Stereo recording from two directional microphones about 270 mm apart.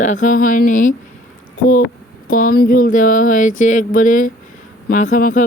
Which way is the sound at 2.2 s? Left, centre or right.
Left.